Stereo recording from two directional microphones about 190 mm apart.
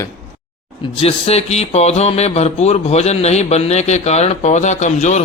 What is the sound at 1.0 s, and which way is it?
Speech, 35° left (ahead or behind).